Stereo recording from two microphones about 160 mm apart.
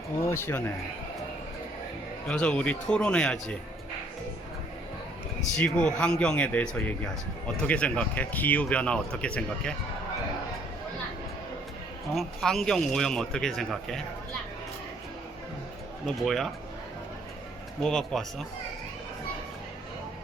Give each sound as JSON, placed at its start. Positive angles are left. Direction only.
{"t": 0.2, "sound": "speech", "side_deg": 15}
{"t": 2.2, "sound": "a man's voice", "side_deg": 5}
{"t": 5.4, "sound": "speech", "side_deg": 5}
{"t": 12.1, "sound": "a man's voice", "side_deg": 0}
{"t": 16.0, "sound": "a man's voice", "side_deg": 0}
{"t": 17.8, "sound": "a man's voice", "side_deg": 5}